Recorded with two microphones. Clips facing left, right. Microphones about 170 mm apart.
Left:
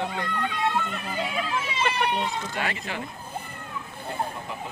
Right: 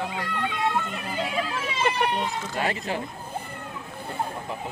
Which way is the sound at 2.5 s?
35° right (ahead or behind).